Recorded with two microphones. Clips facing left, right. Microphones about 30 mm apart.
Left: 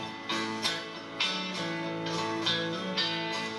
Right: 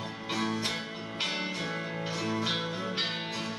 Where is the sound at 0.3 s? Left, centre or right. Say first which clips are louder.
Even; centre.